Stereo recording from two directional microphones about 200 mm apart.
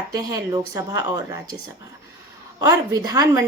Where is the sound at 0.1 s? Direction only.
20° right (ahead or behind).